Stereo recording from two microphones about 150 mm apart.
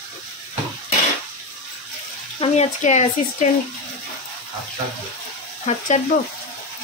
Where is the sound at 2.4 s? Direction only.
50° left (ahead or behind).